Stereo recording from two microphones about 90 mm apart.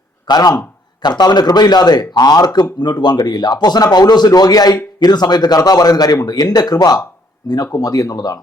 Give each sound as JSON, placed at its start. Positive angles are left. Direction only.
{"t": 0.3, "sound": "a man's voice", "side_deg": 45}